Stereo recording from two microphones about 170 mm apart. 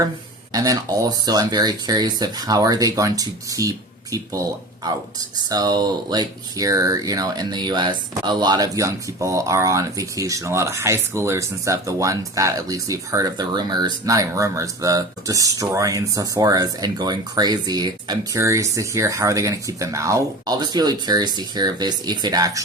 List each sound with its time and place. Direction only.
0.5 s speech: 20° right (ahead or behind)
5.5 s speech: 25° right (ahead or behind)